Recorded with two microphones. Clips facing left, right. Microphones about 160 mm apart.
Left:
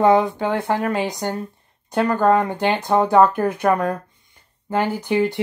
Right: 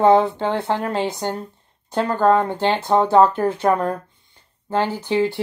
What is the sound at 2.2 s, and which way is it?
Speech, 10° left (ahead or behind).